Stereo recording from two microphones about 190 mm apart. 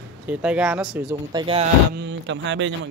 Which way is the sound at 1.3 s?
30° right (ahead or behind).